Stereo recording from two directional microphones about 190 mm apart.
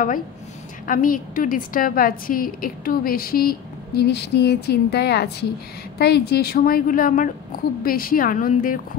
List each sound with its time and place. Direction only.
0.8 s a woman's voice: 45° left (ahead or behind)